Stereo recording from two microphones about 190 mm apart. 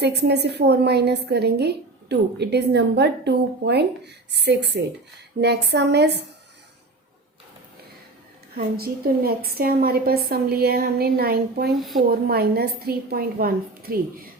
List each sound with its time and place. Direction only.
0.0 s a woman's voice: 60° right (ahead or behind)
8.5 s a woman's voice: 55° right (ahead or behind)